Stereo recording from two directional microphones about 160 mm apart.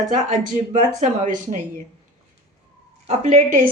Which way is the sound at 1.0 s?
50° right (ahead or behind).